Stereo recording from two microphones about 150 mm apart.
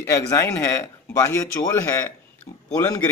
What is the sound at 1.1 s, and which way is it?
Speech, 20° left (ahead or behind).